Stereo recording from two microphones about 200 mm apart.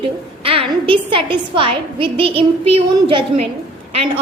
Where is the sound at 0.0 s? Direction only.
30° right (ahead or behind).